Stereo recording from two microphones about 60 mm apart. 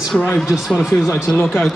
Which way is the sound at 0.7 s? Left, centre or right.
Centre.